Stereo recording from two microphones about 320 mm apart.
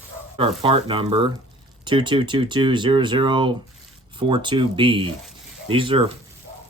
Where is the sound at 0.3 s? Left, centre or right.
Centre.